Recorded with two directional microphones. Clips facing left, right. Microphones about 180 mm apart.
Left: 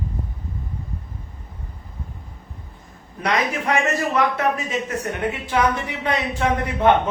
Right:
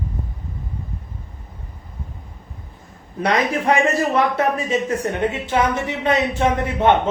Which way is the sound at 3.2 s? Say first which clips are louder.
Right 3 dB; 30° right (ahead or behind).